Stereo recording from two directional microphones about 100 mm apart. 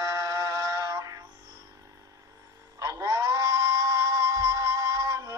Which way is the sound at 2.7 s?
35° right (ahead or behind).